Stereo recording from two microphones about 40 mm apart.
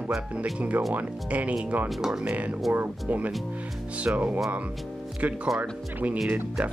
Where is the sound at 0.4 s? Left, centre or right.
Right.